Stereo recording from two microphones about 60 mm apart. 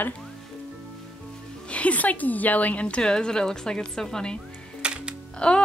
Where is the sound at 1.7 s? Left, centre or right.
Left.